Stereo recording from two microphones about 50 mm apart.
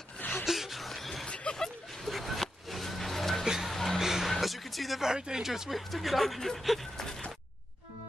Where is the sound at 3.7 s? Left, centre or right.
Centre.